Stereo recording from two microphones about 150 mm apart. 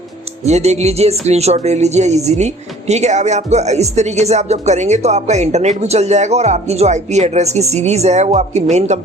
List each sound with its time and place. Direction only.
0.4 s a woman's voice: 45° right (ahead or behind)